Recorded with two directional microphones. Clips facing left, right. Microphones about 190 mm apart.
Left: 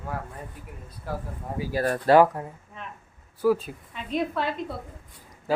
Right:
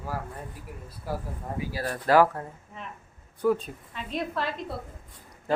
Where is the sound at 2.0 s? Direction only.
25° left (ahead or behind).